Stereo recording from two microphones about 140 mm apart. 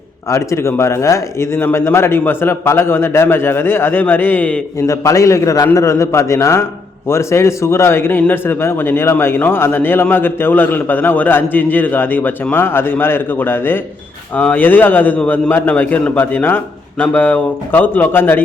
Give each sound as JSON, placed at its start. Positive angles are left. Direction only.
{"t": 0.3, "sound": "a man's voice", "side_deg": 20}
{"t": 4.9, "sound": "a man's voice", "side_deg": 20}